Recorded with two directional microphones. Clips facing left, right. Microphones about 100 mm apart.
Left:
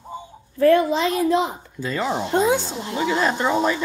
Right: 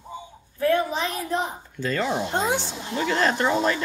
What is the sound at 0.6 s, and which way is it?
Speech, 80° left.